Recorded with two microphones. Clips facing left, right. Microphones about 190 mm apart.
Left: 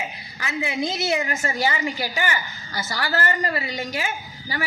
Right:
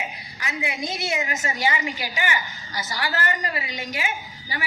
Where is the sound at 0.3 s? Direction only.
30° left (ahead or behind).